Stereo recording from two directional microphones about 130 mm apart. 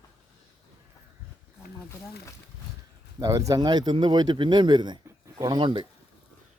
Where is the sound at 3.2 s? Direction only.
25° right (ahead or behind).